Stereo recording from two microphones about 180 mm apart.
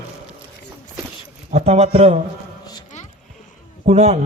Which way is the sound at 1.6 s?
35° right (ahead or behind).